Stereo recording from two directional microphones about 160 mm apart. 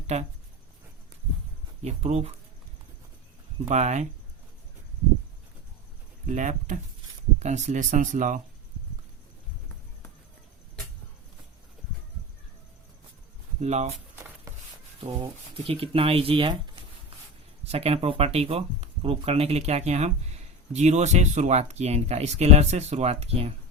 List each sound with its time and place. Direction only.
0.1 s speech: 45° right (ahead or behind)
1.8 s speech: 45° right (ahead or behind)
3.7 s speech: 45° right (ahead or behind)
6.2 s speech: 50° right (ahead or behind)
13.6 s speech: 45° right (ahead or behind)
14.5 s a sound: 20° right (ahead or behind)
15.6 s speech: 35° right (ahead or behind)
17.7 s speech: 40° right (ahead or behind)